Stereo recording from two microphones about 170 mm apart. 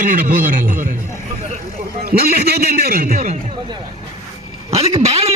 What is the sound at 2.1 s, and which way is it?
A man's voice, 60° right (ahead or behind).